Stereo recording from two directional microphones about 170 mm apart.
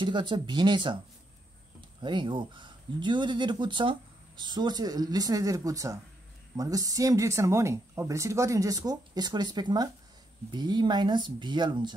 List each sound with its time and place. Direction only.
0.0 s speech: 30° right (ahead or behind)